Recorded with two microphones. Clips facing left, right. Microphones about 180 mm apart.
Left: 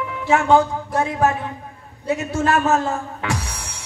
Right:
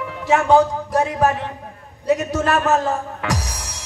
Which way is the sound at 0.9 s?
40° right (ahead or behind).